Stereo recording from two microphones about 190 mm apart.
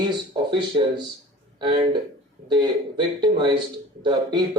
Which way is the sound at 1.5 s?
25° right (ahead or behind).